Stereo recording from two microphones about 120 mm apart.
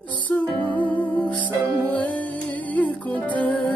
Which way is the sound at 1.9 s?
15° left (ahead or behind).